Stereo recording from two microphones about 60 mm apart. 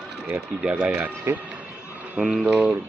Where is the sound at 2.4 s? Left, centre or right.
Right.